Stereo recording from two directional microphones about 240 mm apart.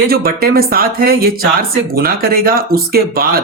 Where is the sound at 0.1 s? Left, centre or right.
Right.